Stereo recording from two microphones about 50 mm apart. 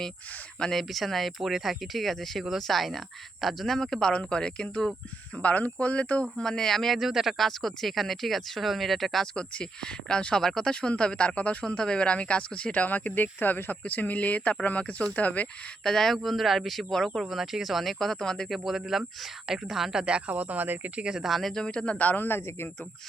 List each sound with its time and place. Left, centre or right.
0.6 s speech: centre; by 6.2 s left
6.3 s speech: centre
9.3 s speech: centre
10.4 s speech: centre
10.7 s speech: centre
11.6 s speech: centre
15.8 s speech: centre
17.2 s speech: centre
18.4 s speech: centre
20.3 s speech: right
20.9 s speech: centre
21.2 s speech: centre
21.5 s speech: centre; by 22.7 s left